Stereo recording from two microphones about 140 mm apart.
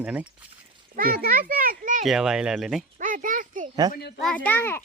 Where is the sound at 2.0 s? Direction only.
5° right (ahead or behind).